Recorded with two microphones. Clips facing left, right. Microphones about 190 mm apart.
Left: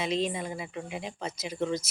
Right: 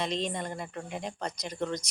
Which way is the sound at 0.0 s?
5° left (ahead or behind).